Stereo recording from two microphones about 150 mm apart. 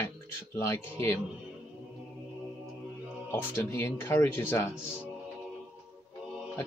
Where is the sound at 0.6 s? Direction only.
20° left (ahead or behind).